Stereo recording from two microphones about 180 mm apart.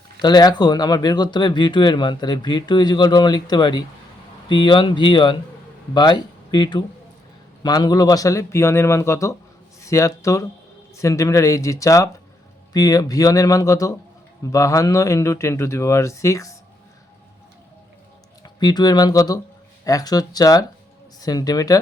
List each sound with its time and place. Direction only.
0.2 s speech: 25° left (ahead or behind)
18.4 s speech: 20° left (ahead or behind)